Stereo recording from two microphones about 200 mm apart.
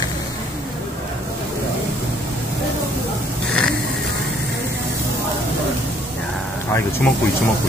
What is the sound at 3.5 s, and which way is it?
Snoring, 5° left (ahead or behind).